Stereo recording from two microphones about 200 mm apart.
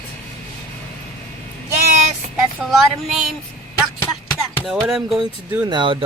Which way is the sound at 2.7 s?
Centre (ahead or behind).